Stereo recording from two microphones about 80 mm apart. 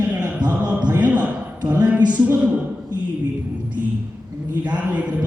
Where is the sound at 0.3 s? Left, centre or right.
Centre.